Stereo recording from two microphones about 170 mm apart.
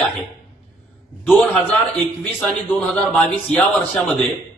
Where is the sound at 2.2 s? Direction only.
5° left (ahead or behind).